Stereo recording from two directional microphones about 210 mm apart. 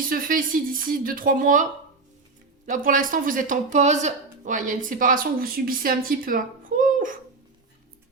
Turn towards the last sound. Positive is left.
turn(degrees=-40)  # may be behind; listen again after turning